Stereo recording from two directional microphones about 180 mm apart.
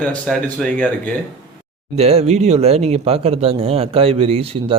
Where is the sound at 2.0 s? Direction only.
35° right (ahead or behind).